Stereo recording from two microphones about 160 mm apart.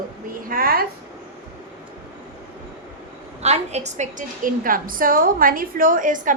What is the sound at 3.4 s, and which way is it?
A woman's voice, 45° right (ahead or behind).